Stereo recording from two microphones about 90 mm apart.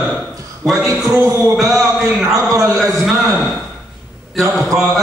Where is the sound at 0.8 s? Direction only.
30° right (ahead or behind).